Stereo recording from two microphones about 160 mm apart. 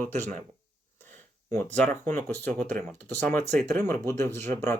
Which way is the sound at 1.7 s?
10° left (ahead or behind).